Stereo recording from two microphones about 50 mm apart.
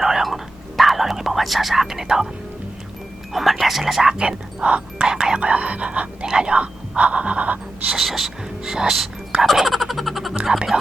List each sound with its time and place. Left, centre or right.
0.0 s whispering: centre
3.3 s a sound: centre
4.2 s speech: centre
5.4 s speech: right
7.9 s speech: centre
9.4 s a sound: centre